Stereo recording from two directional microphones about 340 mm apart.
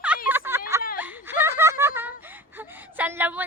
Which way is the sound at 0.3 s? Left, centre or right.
Centre.